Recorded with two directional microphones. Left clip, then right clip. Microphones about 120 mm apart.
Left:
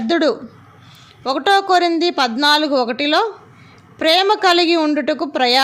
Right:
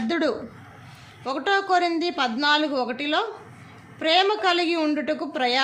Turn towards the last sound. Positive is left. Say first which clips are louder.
# left 8 dB
turn(degrees=55)  # may be behind; listen again after turning